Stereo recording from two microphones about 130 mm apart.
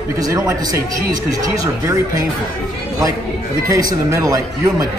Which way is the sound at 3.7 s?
25° right (ahead or behind).